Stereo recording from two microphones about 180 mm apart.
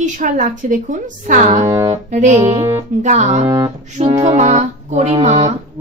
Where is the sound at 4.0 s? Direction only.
35° right (ahead or behind).